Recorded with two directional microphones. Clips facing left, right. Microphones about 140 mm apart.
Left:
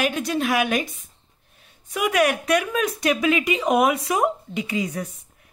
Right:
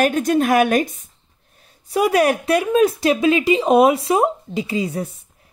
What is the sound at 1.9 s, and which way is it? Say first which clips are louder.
A woman's voice: right 5 dB; 35° right (ahead or behind).